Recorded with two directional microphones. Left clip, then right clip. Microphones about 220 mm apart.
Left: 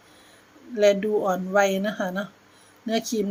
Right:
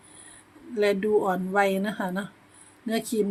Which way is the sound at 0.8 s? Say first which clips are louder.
Left 3 dB; centre (ahead or behind).